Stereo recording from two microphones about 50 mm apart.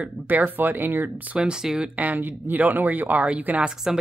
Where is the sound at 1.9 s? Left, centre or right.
Right.